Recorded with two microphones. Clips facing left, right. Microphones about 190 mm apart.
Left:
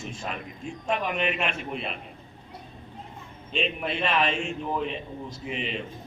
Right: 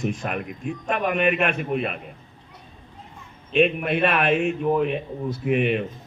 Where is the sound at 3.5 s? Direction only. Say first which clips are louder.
Right 9 dB; 55° right (ahead or behind).